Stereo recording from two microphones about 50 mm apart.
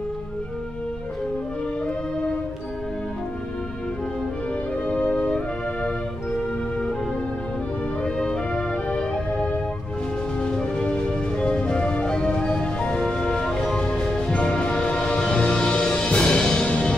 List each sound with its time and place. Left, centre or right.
4.8 s music: left
8.0 s music: centre
8.5 s music: left